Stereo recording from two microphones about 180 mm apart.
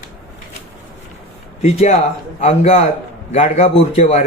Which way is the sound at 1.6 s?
40° left (ahead or behind).